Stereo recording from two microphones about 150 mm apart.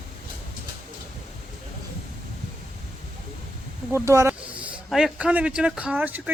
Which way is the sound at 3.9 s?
15° right (ahead or behind).